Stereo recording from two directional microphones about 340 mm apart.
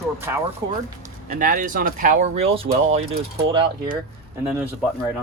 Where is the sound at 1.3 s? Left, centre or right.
Right.